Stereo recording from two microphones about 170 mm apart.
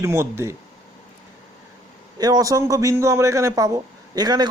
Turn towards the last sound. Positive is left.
turn(degrees=-25)  # may be behind; listen again after turning